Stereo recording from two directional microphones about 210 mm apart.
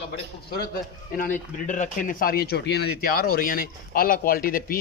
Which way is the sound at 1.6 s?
40° left (ahead or behind).